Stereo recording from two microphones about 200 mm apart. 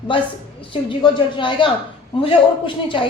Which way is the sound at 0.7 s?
25° left (ahead or behind).